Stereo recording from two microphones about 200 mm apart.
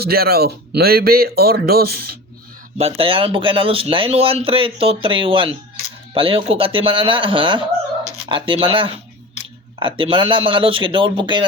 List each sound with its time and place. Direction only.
0.0 s speech: 50° right (ahead or behind)
2.7 s speech: 30° right (ahead or behind)